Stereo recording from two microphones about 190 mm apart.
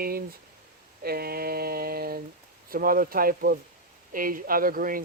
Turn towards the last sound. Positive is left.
turn(degrees=-45)  # may be behind; listen again after turning